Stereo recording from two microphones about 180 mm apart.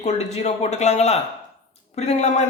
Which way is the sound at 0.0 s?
40° left (ahead or behind).